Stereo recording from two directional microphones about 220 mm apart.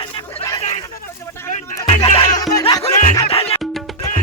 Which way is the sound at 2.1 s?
20° left (ahead or behind).